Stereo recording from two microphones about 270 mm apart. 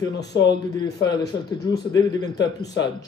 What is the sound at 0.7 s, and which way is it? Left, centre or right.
A man's voice, centre.